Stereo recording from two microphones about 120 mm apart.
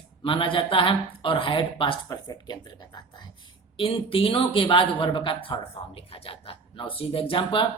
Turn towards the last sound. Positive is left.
turn(degrees=45)  # may be behind; listen again after turning